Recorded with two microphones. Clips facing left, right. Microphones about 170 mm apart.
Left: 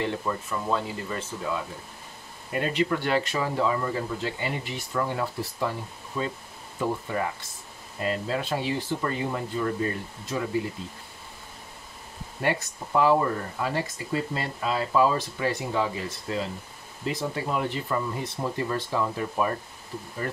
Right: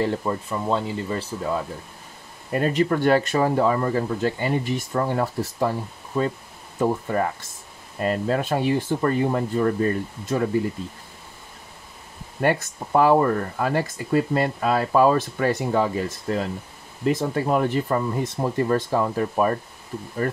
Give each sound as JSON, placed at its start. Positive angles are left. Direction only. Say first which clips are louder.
{"t": 0.0, "sound": "speech", "louder": "right 5 dB", "side_deg": -30}
{"t": 12.4, "sound": "speech", "louder": "right 5 dB", "side_deg": -50}